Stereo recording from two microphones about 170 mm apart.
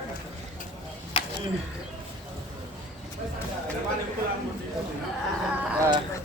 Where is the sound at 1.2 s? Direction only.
30° left (ahead or behind).